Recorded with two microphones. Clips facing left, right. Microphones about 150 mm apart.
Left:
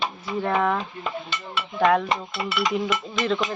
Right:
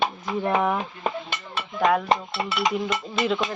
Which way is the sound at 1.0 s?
50° right (ahead or behind).